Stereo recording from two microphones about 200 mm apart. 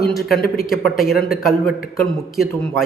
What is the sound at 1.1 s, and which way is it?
Speech, 50° left (ahead or behind).